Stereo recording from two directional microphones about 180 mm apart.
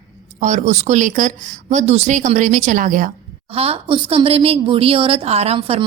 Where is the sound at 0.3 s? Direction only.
40° right (ahead or behind).